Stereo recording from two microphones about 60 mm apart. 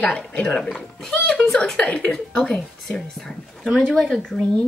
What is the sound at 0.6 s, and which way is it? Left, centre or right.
Speech, centre.